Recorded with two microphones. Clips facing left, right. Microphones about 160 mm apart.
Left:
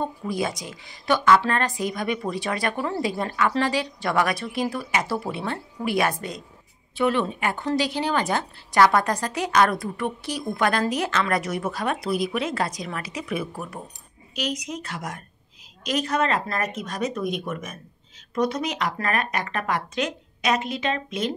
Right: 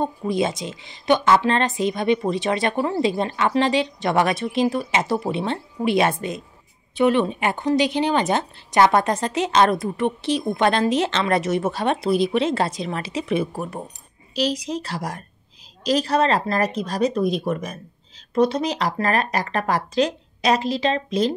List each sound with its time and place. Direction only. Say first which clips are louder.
0.0 s a woman's voice: right 5 dB; 25° right (ahead or behind)